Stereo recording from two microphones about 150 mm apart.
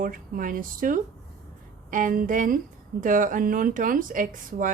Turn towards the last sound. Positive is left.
turn(degrees=-60)  # may be behind; listen again after turning